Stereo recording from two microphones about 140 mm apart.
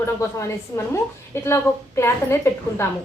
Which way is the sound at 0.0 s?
20° left (ahead or behind).